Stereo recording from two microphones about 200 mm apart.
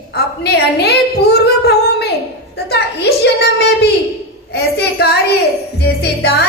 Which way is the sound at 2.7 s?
55° left (ahead or behind).